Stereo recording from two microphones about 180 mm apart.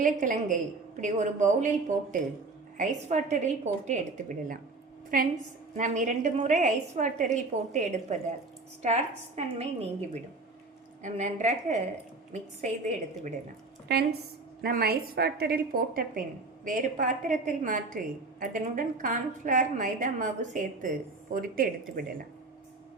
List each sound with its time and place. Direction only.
0.0 s a woman's voice: 45° right (ahead or behind)
11.0 s a woman's voice: 40° right (ahead or behind)
13.8 s a woman's voice: 65° right (ahead or behind)